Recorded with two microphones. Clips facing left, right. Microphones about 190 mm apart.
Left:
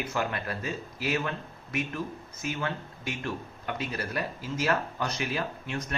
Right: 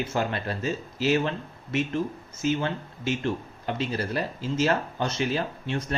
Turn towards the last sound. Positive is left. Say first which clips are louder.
# right 4 dB
turn(degrees=-30)  # may be behind; listen again after turning